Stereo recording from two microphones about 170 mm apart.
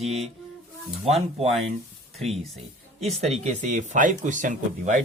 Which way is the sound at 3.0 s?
40° right (ahead or behind).